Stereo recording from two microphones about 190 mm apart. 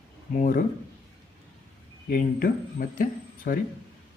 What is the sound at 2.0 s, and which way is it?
Speech, 50° left (ahead or behind).